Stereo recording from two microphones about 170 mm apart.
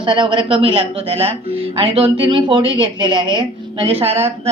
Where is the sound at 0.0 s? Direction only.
30° right (ahead or behind).